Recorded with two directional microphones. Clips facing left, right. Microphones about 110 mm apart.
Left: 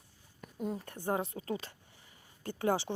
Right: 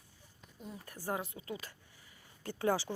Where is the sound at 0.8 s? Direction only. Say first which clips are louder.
Left 1 dB; 25° left (ahead or behind).